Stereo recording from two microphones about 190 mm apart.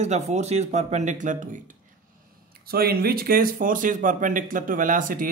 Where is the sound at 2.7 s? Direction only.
55° right (ahead or behind).